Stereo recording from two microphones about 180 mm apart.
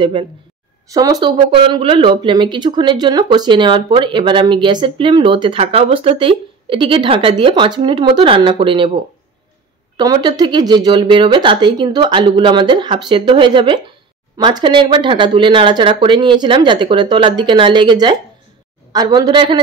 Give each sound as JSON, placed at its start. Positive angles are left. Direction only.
{"t": 0.0, "sound": "speech", "side_deg": -25}
{"t": 1.5, "sound": "speech", "side_deg": -30}
{"t": 9.9, "sound": "speech", "side_deg": -20}